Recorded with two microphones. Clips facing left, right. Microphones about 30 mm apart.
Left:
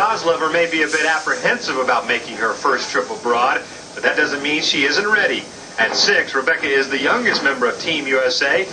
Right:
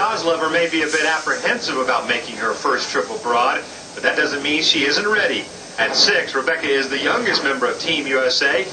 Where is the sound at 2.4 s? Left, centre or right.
Centre.